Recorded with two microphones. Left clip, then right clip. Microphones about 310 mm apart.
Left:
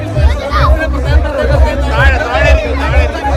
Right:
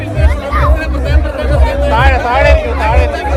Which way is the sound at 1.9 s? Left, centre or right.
Right.